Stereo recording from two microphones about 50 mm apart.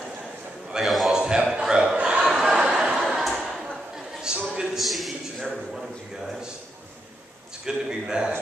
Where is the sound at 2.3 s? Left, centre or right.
Centre.